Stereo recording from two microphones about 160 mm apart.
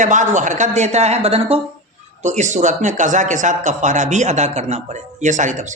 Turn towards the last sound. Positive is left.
turn(degrees=-50)  # may be behind; listen again after turning